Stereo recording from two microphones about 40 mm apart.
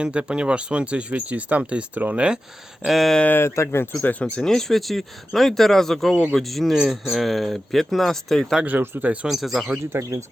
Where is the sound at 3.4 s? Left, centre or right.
Left.